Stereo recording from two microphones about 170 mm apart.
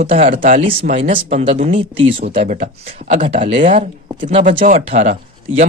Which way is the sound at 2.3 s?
45° right (ahead or behind).